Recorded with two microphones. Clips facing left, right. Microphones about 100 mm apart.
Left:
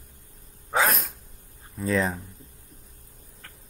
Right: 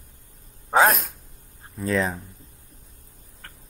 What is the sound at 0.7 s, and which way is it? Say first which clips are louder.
Speech: right 6 dB; 45° right (ahead or behind).